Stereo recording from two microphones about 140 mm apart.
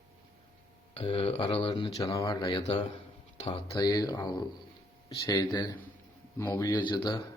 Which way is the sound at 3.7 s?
25° left (ahead or behind).